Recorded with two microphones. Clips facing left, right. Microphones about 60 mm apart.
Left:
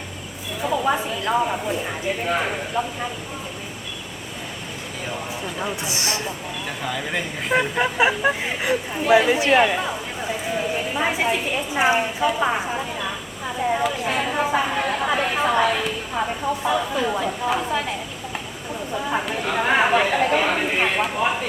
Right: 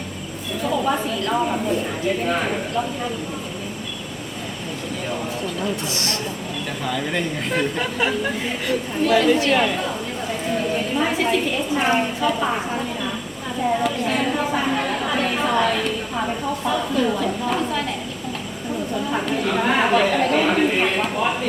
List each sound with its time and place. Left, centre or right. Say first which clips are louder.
0.6 s speech: even; centre
5.5 s speech: right 2 dB; centre
7.8 s a woman's voice: left 3 dB; left
13.6 s a sound: right 1 dB; centre
15.1 s speech: even; centre
19.1 s speech: right 1 dB; centre